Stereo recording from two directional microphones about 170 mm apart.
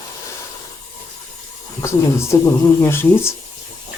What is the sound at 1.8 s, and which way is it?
Speech, 15° left (ahead or behind).